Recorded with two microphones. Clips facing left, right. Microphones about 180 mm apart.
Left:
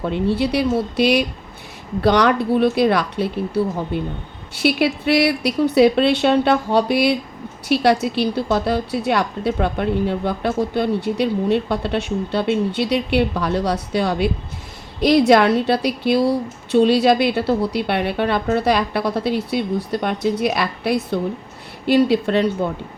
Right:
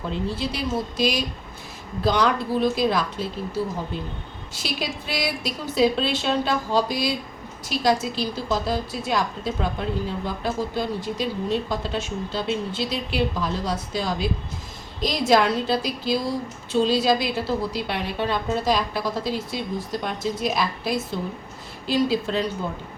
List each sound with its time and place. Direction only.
0.1 s a woman's voice: 65° left (ahead or behind)